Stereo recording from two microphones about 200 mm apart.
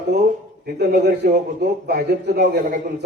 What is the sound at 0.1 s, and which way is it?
A man's voice, 45° right (ahead or behind).